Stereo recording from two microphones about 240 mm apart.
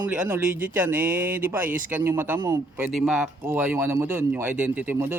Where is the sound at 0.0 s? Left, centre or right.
Centre.